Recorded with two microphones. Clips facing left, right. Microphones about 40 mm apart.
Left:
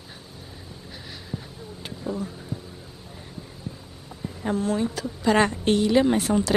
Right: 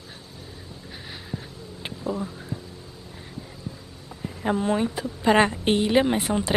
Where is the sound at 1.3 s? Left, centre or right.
Centre.